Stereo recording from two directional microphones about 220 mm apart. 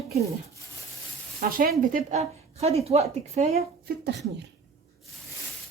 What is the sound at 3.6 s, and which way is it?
Speech, 45° right (ahead or behind).